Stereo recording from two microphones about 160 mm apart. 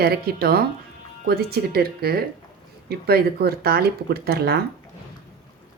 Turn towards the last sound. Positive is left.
turn(degrees=-75)  # may be behind; listen again after turning